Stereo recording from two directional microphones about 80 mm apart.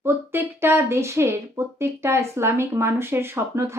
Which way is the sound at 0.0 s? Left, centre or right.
Right.